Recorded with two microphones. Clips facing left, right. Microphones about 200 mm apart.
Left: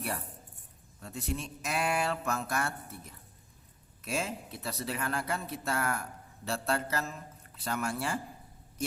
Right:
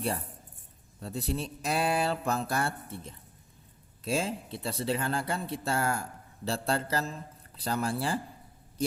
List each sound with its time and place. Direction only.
0.9 s speech: 35° right (ahead or behind)